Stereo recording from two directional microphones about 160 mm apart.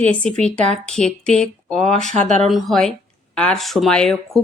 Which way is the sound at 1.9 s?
50° right (ahead or behind).